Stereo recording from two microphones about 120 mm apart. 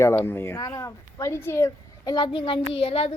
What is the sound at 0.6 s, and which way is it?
A woman's voice, 30° left (ahead or behind).